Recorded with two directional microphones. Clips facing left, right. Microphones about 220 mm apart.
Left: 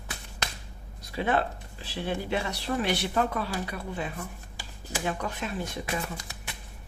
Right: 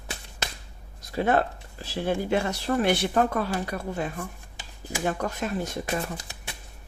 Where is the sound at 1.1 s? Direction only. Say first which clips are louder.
Right 4 dB; 45° right (ahead or behind).